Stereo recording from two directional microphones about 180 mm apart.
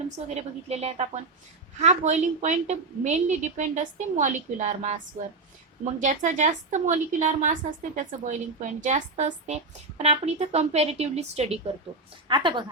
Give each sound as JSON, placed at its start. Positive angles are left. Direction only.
{"t": 0.3, "sound": "a woman's voice", "side_deg": -35}
{"t": 12.3, "sound": "a woman's voice", "side_deg": -25}